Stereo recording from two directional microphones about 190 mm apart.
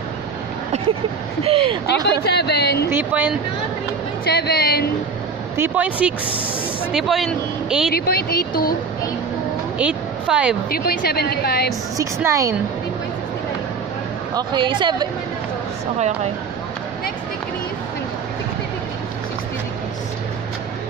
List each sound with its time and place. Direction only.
1.4 s speech: 30° right (ahead or behind)
2.0 s a woman's voice: 60° left (ahead or behind)
2.9 s a woman's voice: 10° right (ahead or behind)
4.3 s a woman's voice: 60° left (ahead or behind)
5.6 s a woman's voice: 5° right (ahead or behind)
7.9 s speech: 55° left (ahead or behind)
9.8 s a woman's voice: 5° right (ahead or behind)
10.7 s a woman's voice: 55° left (ahead or behind)
12.0 s a woman's voice: 15° right (ahead or behind)
14.3 s speech: 25° right (ahead or behind)